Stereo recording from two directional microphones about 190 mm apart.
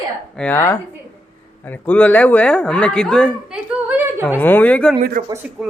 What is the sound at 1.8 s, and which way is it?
Speech, 10° left (ahead or behind).